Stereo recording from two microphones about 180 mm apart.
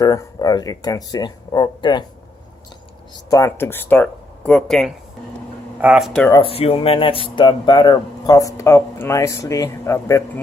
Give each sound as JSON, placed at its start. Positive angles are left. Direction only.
{"t": 0.0, "sound": "speech", "side_deg": 20}
{"t": 3.2, "sound": "speech", "side_deg": 15}
{"t": 6.3, "sound": "speech", "side_deg": 30}